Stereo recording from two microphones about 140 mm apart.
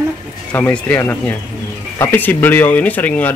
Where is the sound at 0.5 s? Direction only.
10° left (ahead or behind).